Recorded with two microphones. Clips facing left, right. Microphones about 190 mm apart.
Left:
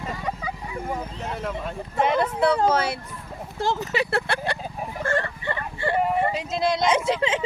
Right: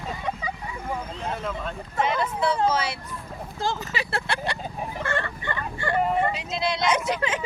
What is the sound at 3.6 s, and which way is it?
Speech, 65° left (ahead or behind).